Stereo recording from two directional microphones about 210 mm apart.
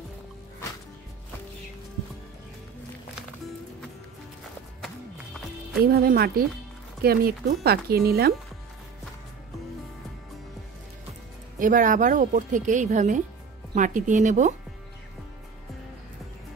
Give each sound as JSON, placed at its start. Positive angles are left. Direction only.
{"t": 4.8, "sound": "music", "side_deg": 0}
{"t": 5.8, "sound": "speech", "side_deg": -45}
{"t": 11.6, "sound": "speech", "side_deg": -40}